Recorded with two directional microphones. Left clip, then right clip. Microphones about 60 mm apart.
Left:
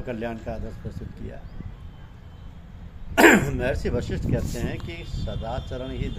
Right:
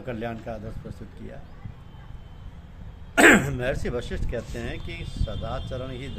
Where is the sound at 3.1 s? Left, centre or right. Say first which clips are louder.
Even; centre.